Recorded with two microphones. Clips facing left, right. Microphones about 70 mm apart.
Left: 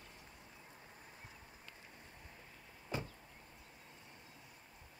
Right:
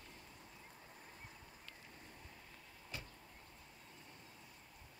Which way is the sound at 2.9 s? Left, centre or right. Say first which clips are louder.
Left 9 dB; left.